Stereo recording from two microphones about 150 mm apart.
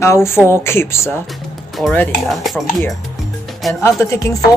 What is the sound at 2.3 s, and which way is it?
Speech, centre (ahead or behind).